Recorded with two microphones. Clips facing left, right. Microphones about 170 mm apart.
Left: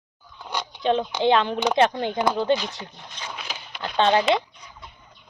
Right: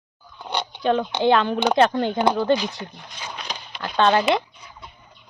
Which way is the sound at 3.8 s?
20° left (ahead or behind).